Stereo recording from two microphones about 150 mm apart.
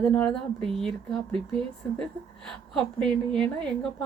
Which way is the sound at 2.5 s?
5° left (ahead or behind).